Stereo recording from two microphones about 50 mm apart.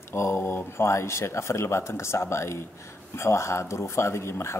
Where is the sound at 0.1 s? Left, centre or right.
Left.